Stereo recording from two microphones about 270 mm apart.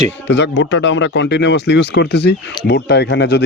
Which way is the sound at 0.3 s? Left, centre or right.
Left.